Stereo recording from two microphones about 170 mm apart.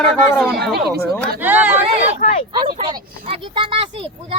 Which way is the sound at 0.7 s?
70° right (ahead or behind).